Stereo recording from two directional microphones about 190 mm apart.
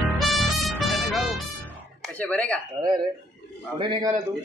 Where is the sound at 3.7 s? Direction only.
25° right (ahead or behind).